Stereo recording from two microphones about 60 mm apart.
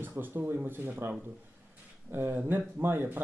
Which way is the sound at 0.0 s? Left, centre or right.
Right.